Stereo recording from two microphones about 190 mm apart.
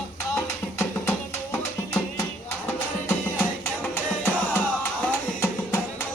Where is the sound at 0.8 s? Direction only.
10° left (ahead or behind).